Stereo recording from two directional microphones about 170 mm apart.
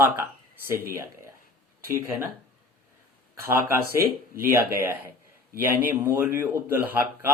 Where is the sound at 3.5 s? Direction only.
15° right (ahead or behind).